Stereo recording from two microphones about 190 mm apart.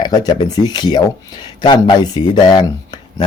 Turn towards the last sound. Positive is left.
turn(degrees=25)  # may be behind; listen again after turning